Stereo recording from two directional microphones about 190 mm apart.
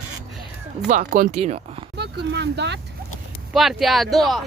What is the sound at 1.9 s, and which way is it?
Speech, 60° right (ahead or behind).